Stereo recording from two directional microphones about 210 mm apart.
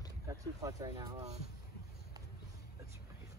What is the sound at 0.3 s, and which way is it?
Speech, 15° right (ahead or behind).